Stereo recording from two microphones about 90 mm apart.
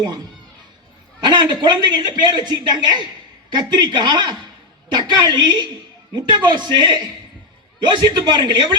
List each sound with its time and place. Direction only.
1.2 s a man's voice: 55° right (ahead or behind)